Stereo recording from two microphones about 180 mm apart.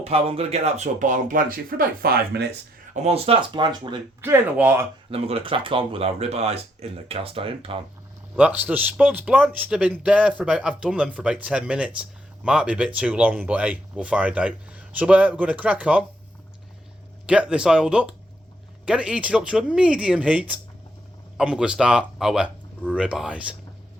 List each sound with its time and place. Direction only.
0.0 s speech: 35° right (ahead or behind); by 2.5 s 60° right (ahead or behind)
2.9 s speech: 35° right (ahead or behind)
4.2 s a man's voice: 10° right (ahead or behind)
5.1 s speech: 30° right (ahead or behind)
8.4 s a man's voice: 10° right (ahead or behind)
17.2 s speech: 5° right (ahead or behind)